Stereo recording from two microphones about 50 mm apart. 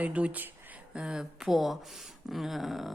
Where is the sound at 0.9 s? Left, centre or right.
Centre.